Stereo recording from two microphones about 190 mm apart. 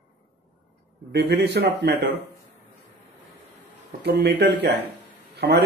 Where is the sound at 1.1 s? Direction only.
60° right (ahead or behind).